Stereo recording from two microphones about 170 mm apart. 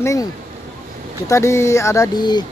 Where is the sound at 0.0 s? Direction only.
20° left (ahead or behind).